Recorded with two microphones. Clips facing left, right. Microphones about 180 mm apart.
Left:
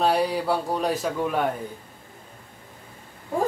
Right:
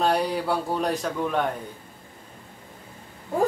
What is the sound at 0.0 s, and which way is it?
Speech, centre (ahead or behind).